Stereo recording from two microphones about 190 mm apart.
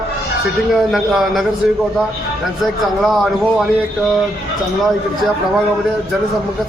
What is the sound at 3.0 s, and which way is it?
Speech, centre (ahead or behind).